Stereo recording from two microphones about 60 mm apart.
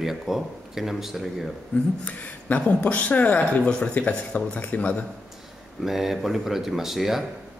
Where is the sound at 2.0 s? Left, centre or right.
Left.